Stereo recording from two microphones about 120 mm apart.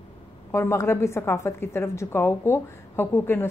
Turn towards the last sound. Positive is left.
turn(degrees=20)  # may be behind; listen again after turning